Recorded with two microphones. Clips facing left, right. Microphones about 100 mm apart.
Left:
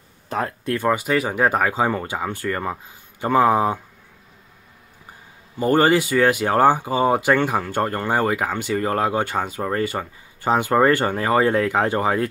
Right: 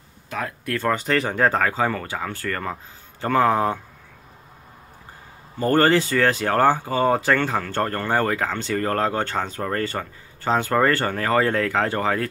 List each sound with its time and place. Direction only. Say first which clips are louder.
0.3 s speech: left 4 dB; 30° left (ahead or behind)
0.7 s speech: left 1 dB; 10° left (ahead or behind)
5.6 s speech: left 1 dB; 15° left (ahead or behind)